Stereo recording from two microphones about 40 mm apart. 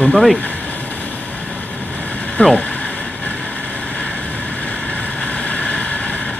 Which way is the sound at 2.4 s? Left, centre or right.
Left.